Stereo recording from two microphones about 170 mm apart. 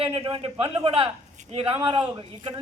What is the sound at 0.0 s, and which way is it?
A man's voice, 30° right (ahead or behind).